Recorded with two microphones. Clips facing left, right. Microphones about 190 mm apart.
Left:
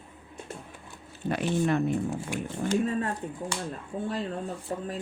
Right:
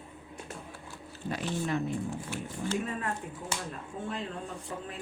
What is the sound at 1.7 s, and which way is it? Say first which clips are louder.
Speech: left 4 dB; 60° left (ahead or behind).